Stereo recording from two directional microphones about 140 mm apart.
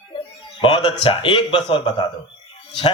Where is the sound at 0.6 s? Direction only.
35° left (ahead or behind).